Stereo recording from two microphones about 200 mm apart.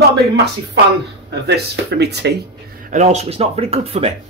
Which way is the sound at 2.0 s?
55° right (ahead or behind).